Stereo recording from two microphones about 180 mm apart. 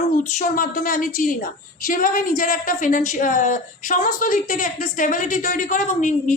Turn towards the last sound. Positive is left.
turn(degrees=45)  # may be behind; listen again after turning